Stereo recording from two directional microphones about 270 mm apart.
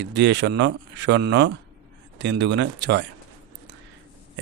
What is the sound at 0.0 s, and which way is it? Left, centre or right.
Speech, right.